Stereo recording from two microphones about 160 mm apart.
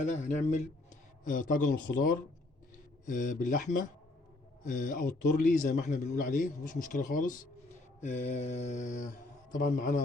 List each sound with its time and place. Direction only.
0.0 s speech: 50° left (ahead or behind)
8.0 s speech: 45° left (ahead or behind)